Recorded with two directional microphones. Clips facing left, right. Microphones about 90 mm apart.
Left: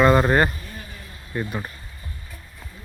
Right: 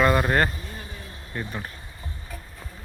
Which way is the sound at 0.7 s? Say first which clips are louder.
Even; 25° right (ahead or behind).